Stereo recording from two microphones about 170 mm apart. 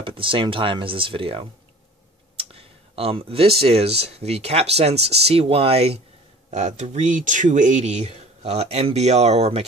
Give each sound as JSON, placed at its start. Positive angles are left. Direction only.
{"t": 0.0, "sound": "speech", "side_deg": -30}